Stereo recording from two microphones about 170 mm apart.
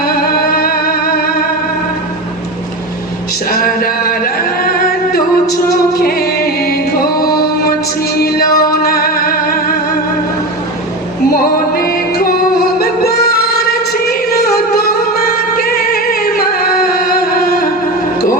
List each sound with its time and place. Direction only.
0.0 s music: 60° left (ahead or behind)
3.5 s music: 60° left (ahead or behind)
11.3 s music: 60° left (ahead or behind)
12.8 s singing: 65° left (ahead or behind)
14.1 s music: 65° left (ahead or behind)